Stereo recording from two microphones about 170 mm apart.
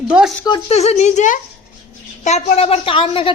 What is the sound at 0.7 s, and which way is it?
A woman's voice, 40° left (ahead or behind).